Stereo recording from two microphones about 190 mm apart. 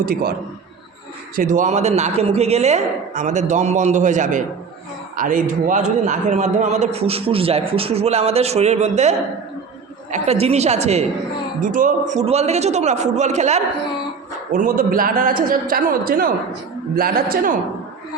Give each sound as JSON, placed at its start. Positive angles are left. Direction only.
{"t": 0.0, "sound": "a man's voice", "side_deg": -50}
{"t": 1.4, "sound": "a man's voice", "side_deg": -45}
{"t": 14.5, "sound": "a man's voice", "side_deg": -50}